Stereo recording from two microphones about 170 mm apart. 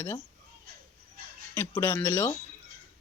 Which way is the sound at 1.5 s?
15° left (ahead or behind).